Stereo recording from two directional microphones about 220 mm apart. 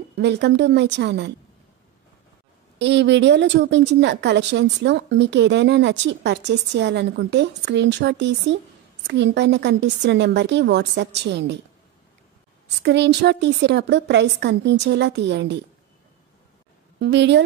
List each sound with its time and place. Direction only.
0.2 s a woman's voice: 50° right (ahead or behind)
2.8 s a woman's voice: 55° right (ahead or behind)
12.8 s a woman's voice: 50° right (ahead or behind)
17.0 s a woman's voice: 55° right (ahead or behind)